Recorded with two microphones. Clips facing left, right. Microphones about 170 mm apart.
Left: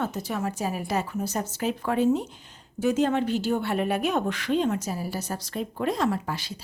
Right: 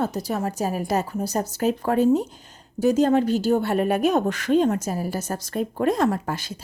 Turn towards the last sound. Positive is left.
turn(degrees=-45)  # may be behind; listen again after turning